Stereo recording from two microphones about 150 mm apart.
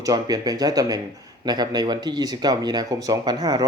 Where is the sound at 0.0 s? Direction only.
25° right (ahead or behind).